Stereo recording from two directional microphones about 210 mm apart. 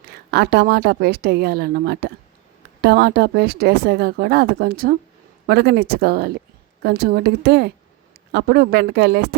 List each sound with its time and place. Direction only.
0.3 s speech: 50° right (ahead or behind)